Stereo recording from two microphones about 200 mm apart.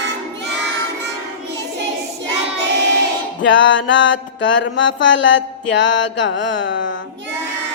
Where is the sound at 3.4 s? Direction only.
65° left (ahead or behind).